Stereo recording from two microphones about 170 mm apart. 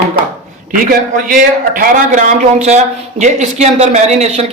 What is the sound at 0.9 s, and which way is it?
A man's voice, 55° right (ahead or behind).